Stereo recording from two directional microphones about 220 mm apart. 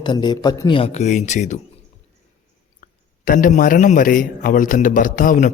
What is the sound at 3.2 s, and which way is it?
A man's voice, 35° left (ahead or behind).